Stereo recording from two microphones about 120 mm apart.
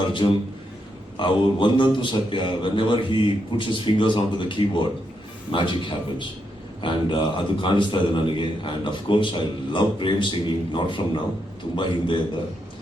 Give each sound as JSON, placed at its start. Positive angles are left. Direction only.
{"t": 1.1, "sound": "a man's voice", "side_deg": 45}